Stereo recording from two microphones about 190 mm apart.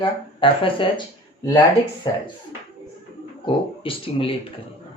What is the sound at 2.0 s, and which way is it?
Speech, 20° left (ahead or behind).